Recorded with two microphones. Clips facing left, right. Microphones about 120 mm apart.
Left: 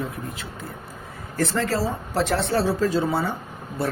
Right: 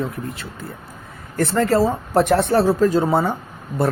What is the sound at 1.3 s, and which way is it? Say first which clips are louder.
Speech: right 6 dB; 55° right (ahead or behind).